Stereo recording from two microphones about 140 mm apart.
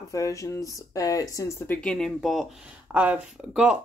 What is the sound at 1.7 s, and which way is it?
Speech, 5° left (ahead or behind).